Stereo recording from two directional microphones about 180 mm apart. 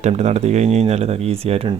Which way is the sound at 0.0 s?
40° right (ahead or behind).